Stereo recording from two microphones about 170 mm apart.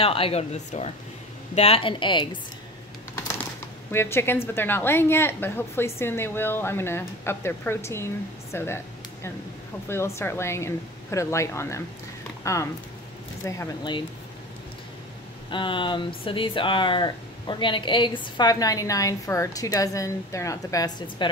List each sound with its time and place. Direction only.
0.0 s speech: 35° left (ahead or behind)
3.9 s a woman's voice: 15° left (ahead or behind)
15.5 s a woman's voice: 30° left (ahead or behind)